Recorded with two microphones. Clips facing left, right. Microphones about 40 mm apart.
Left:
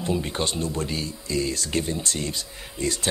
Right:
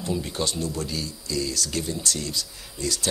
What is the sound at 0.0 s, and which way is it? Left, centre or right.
Speech, left.